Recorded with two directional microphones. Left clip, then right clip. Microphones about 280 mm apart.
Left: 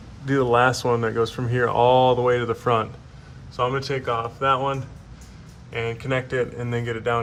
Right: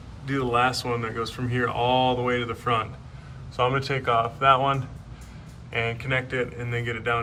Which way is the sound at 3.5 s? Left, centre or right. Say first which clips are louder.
Even; centre.